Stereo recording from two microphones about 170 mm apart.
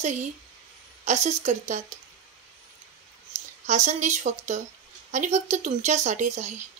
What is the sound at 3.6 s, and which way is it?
Speech, 45° right (ahead or behind).